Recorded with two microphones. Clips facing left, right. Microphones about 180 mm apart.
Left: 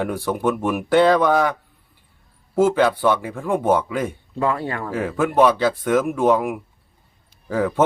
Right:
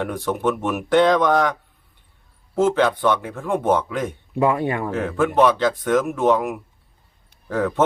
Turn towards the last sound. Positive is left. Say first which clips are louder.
# left 1 dB
turn(degrees=5)  # may be behind; listen again after turning